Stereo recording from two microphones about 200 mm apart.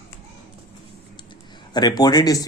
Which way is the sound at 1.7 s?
20° left (ahead or behind).